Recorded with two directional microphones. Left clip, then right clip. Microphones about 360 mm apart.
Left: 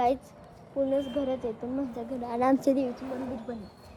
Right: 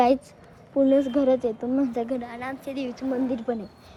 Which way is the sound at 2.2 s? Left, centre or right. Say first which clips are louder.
Left 7 dB; centre.